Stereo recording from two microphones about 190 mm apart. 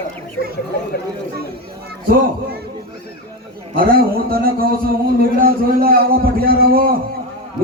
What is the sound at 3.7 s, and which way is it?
A man's voice, 50° right (ahead or behind).